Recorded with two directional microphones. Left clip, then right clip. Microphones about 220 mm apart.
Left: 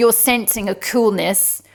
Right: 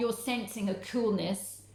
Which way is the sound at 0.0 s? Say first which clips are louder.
Left 17 dB; 45° left (ahead or behind).